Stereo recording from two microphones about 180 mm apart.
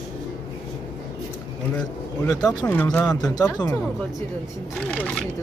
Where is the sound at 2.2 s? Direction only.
20° left (ahead or behind).